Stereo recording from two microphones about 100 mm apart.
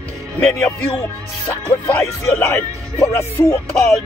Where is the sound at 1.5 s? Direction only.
15° left (ahead or behind).